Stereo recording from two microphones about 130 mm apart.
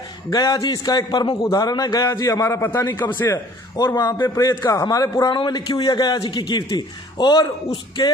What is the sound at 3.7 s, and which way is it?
A man's voice, 30° left (ahead or behind).